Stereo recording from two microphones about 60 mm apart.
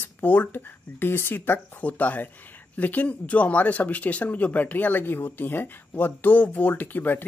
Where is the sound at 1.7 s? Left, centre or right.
Left.